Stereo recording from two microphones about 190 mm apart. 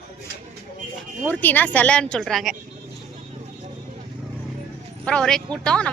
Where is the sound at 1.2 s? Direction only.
10° left (ahead or behind).